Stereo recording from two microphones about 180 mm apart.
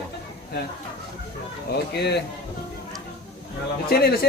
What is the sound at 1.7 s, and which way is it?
Mantra, 65° left (ahead or behind).